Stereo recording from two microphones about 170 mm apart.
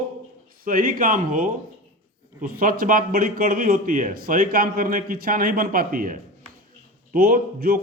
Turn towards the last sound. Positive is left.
turn(degrees=-60)  # may be behind; listen again after turning